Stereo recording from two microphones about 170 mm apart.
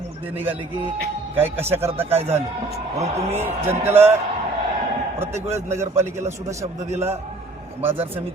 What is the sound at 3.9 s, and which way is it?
Speech, 15° right (ahead or behind).